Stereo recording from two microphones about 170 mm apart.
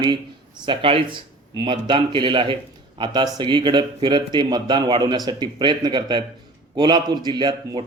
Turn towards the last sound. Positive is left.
turn(degrees=-25)  # may be behind; listen again after turning